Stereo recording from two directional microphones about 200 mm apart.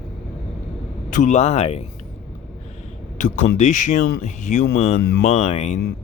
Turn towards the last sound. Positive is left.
turn(degrees=30)  # may be behind; listen again after turning